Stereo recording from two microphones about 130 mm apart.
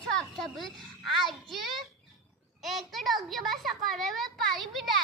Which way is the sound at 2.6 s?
Centre (ahead or behind).